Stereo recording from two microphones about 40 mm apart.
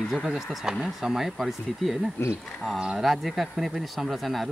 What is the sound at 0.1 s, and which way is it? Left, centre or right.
Speech, centre.